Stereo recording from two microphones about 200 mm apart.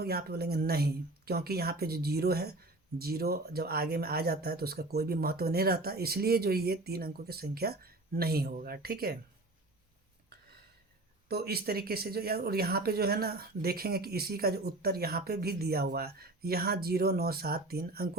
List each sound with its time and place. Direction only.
0.0 s speech: 50° right (ahead or behind)
11.3 s speech: 50° right (ahead or behind)